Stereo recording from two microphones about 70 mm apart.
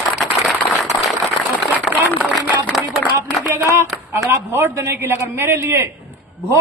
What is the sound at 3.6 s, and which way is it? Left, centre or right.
A man's voice, right.